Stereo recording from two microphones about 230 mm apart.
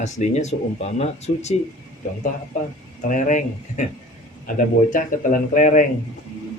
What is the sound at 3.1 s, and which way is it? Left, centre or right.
Speech, left.